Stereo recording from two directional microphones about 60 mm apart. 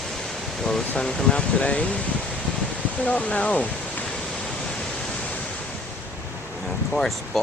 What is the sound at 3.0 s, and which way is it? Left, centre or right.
Speech, left.